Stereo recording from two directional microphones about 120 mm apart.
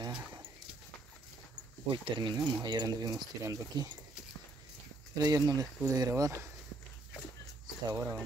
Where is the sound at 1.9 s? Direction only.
40° right (ahead or behind).